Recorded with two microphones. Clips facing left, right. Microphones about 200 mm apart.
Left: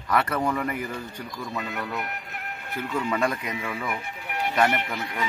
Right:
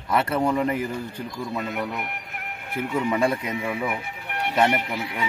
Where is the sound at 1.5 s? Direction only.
5° right (ahead or behind).